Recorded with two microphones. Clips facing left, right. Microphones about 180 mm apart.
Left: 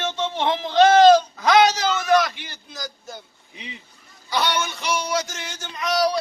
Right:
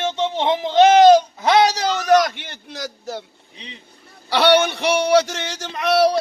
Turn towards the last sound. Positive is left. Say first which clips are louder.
# right 6 dB
turn(degrees=-65)  # may be behind; listen again after turning